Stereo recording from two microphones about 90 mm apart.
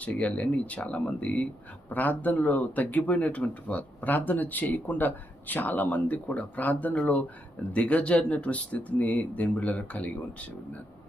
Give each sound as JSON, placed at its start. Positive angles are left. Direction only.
{"t": 0.0, "sound": "speech", "side_deg": 15}